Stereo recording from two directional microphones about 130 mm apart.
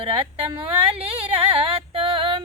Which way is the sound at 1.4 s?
50° right (ahead or behind).